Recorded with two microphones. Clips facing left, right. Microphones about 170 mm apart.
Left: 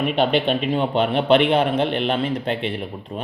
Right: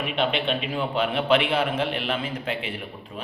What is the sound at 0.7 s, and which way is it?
A man's voice, 30° left (ahead or behind).